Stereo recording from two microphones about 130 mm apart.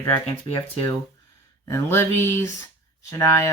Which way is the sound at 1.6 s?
20° left (ahead or behind).